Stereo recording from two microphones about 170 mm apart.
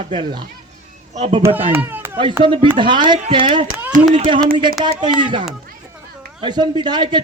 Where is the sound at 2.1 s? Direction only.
30° right (ahead or behind).